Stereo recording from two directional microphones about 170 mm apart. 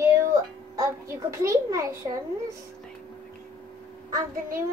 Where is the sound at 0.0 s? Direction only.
15° right (ahead or behind).